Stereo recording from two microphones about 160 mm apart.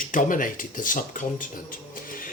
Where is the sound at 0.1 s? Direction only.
55° left (ahead or behind).